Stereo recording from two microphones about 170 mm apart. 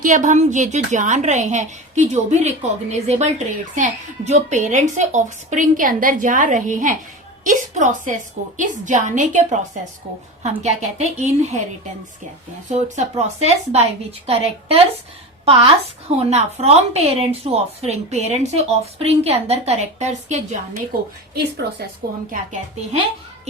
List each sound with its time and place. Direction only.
0.0 s a woman's voice: 50° right (ahead or behind)
12.6 s a woman's voice: 40° right (ahead or behind)
21.6 s a woman's voice: 70° right (ahead or behind)